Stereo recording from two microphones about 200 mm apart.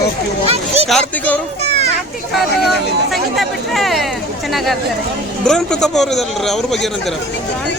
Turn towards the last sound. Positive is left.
turn(degrees=0)  # may be behind; listen again after turning